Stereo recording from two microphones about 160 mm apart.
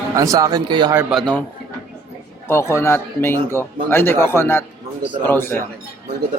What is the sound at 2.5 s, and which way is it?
A man's voice, 15° left (ahead or behind).